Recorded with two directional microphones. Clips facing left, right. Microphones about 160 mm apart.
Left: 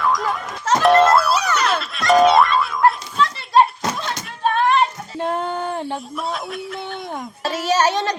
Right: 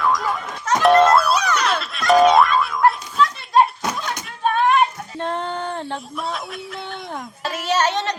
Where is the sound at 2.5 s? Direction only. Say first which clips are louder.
Even; centre (ahead or behind).